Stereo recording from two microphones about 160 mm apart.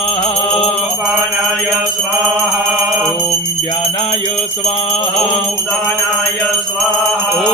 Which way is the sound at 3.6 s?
40° left (ahead or behind).